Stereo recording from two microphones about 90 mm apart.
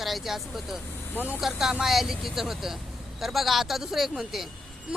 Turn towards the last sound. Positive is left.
turn(degrees=-5)  # may be behind; listen again after turning